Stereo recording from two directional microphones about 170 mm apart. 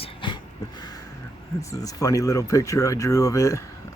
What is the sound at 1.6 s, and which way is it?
Speech, 20° left (ahead or behind).